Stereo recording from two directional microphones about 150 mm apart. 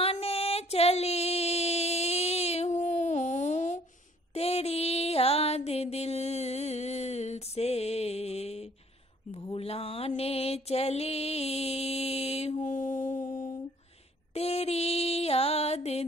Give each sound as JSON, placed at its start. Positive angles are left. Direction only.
{"t": 0.0, "sound": "music", "side_deg": 40}
{"t": 4.3, "sound": "music", "side_deg": 40}
{"t": 9.3, "sound": "mantra", "side_deg": 35}
{"t": 14.3, "sound": "mantra", "side_deg": 45}